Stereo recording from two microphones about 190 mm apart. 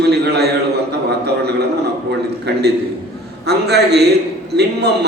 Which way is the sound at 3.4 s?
60° right (ahead or behind).